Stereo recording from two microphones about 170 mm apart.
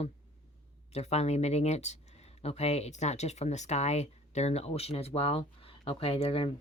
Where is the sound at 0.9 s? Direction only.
40° left (ahead or behind).